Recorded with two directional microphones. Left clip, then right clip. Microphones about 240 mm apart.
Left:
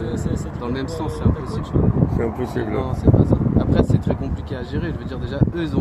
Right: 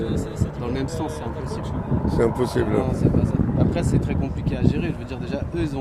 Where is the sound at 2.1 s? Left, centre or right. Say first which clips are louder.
Right 3 dB; centre.